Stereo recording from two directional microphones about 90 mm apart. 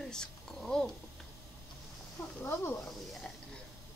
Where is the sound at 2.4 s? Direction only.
25° left (ahead or behind).